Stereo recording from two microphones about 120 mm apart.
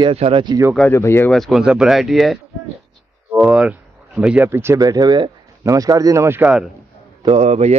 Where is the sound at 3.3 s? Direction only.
10° right (ahead or behind).